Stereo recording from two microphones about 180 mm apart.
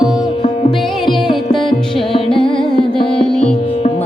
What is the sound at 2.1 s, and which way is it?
Music, 30° left (ahead or behind).